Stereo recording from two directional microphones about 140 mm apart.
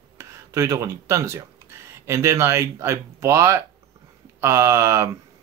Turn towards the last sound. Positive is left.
turn(degrees=-20)  # may be behind; listen again after turning